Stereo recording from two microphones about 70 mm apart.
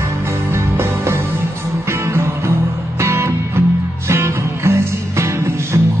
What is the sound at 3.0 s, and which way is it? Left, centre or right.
Music, right.